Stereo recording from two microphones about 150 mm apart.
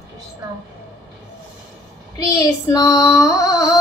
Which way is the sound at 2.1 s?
25° left (ahead or behind).